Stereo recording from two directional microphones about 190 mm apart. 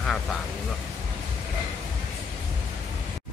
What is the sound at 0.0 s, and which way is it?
Speech, centre (ahead or behind).